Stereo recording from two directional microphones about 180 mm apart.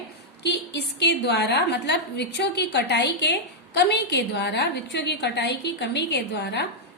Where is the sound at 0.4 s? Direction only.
70° left (ahead or behind).